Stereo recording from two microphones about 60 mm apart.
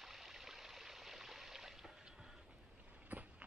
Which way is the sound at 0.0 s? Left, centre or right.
Centre.